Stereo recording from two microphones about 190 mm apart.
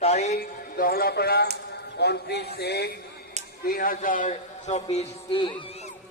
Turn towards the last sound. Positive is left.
turn(degrees=30)  # may be behind; listen again after turning